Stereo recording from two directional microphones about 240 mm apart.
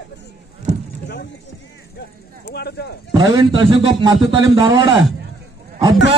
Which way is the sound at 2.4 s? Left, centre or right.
Left.